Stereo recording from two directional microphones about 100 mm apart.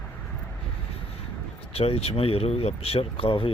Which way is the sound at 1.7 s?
75° left (ahead or behind).